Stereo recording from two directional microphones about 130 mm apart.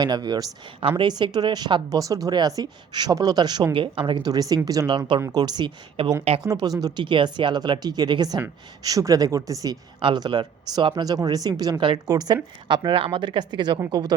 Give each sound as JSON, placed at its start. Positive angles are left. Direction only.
{"t": 0.0, "sound": "speech", "side_deg": -30}
{"t": 10.0, "sound": "speech", "side_deg": -40}